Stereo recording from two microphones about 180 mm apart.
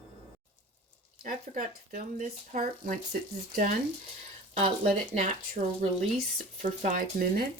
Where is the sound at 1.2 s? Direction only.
50° right (ahead or behind).